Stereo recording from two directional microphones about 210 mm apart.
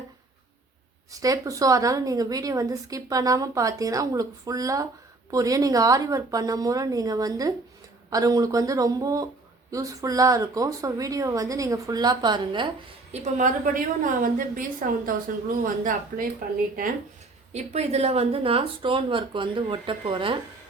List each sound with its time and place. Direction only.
1.1 s a woman's voice: 15° right (ahead or behind)
13.1 s a woman's voice: 35° right (ahead or behind)
17.5 s speech: 30° right (ahead or behind)